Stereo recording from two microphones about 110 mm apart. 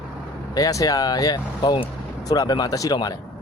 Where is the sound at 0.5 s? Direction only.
35° left (ahead or behind); by 1.9 s 50° left (ahead or behind).